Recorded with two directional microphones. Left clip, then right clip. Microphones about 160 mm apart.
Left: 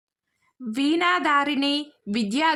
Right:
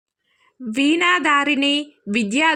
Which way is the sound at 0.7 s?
15° right (ahead or behind).